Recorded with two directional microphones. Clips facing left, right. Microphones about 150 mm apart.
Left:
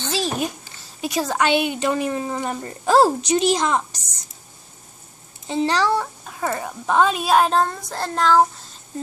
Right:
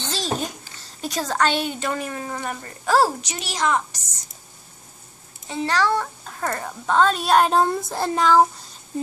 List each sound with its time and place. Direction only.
0.1 s a sound: 10° left (ahead or behind)
1.0 s speech: 10° left (ahead or behind); by 3.8 s 25° left (ahead or behind)
5.5 s a child's voice: 25° left (ahead or behind)
5.9 s a child's voice: 5° left (ahead or behind)